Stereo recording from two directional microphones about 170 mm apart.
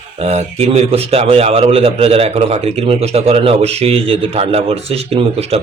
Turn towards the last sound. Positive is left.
turn(degrees=-40)  # may be behind; listen again after turning